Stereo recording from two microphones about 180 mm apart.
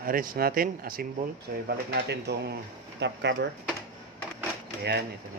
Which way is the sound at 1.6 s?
65° right (ahead or behind).